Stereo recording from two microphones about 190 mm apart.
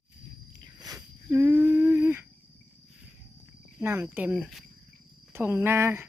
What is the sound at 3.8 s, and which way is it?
Speech, 10° right (ahead or behind).